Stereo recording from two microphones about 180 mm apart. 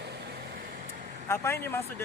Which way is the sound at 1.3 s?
15° left (ahead or behind).